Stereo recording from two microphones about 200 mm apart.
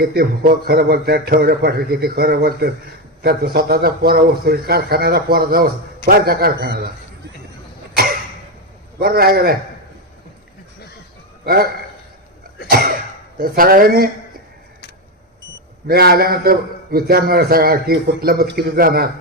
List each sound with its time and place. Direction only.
0.0 s a man's voice: 50° right (ahead or behind)
9.0 s a man's voice: 50° right (ahead or behind)
11.4 s a man's voice: 50° right (ahead or behind)
12.6 s cough: 50° right (ahead or behind)
13.4 s a man's voice: 45° right (ahead or behind)
15.9 s a man's voice: 50° right (ahead or behind)